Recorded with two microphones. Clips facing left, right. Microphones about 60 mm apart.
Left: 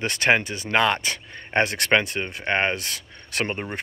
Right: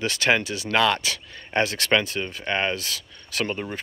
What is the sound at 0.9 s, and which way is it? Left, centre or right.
Speech, left.